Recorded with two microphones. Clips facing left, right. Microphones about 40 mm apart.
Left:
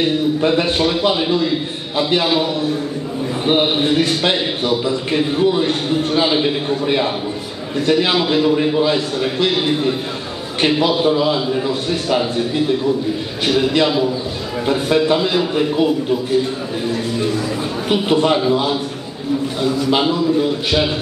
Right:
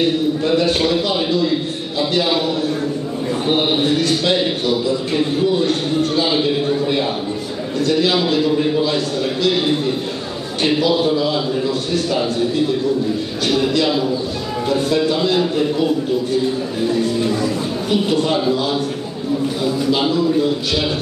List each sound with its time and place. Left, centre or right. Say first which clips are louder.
0.5 s a man's voice: right 3 dB; left
2.0 s a man's voice: left 2 dB; left
3.4 s a man's voice: left 2 dB; left
10.6 s a man's voice: left 1 dB; left
14.7 s a man's voice: left 2 dB; left
17.8 s a man's voice: left 3 dB; left